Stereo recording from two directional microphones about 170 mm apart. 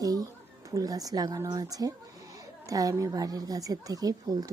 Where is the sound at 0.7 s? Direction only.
20° right (ahead or behind).